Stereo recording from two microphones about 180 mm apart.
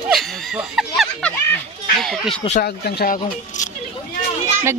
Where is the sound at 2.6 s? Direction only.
55° left (ahead or behind).